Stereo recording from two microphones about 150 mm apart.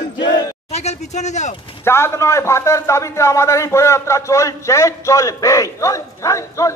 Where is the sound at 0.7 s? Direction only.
50° left (ahead or behind).